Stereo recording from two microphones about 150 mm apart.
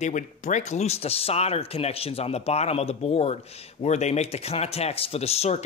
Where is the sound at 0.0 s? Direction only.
50° left (ahead or behind).